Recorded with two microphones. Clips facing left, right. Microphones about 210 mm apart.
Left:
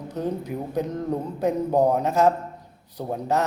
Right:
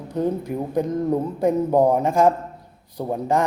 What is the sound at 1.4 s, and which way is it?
Speech, 10° right (ahead or behind).